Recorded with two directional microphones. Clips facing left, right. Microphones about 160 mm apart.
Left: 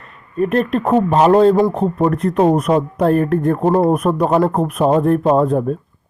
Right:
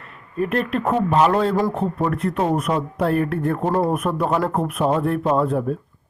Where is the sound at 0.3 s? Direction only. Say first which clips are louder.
Left 5 dB; 35° left (ahead or behind).